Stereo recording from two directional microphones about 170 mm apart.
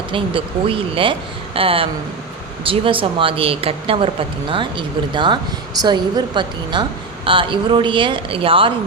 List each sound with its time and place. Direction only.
0.1 s speech: 30° right (ahead or behind)